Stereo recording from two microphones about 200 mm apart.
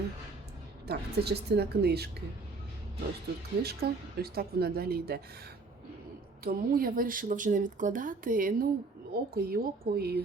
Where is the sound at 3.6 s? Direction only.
50° right (ahead or behind).